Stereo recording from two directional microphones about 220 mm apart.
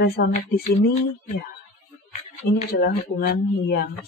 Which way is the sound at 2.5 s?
40° left (ahead or behind).